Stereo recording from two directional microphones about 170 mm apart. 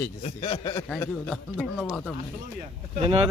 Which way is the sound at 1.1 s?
Centre (ahead or behind).